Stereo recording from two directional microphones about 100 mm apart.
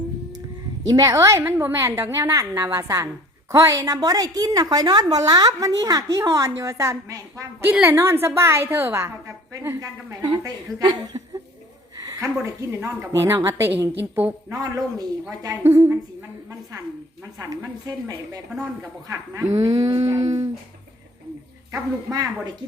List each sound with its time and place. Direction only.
0.9 s a woman's voice: 35° right (ahead or behind)
7.7 s a woman's voice: 10° right (ahead or behind)
7.9 s a woman's voice: 25° right (ahead or behind); by 11.2 s 45° right (ahead or behind)
11.9 s a sound: 35° right (ahead or behind)
13.1 s a woman's voice: 25° right (ahead or behind)
14.5 s a woman's voice: 40° right (ahead or behind)
15.6 s a woman's voice: 25° right (ahead or behind)
17.4 s a woman's voice: 35° right (ahead or behind)
21.7 s a woman's voice: 35° right (ahead or behind)